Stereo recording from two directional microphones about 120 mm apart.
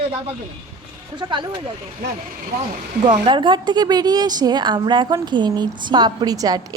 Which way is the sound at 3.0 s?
50° right (ahead or behind).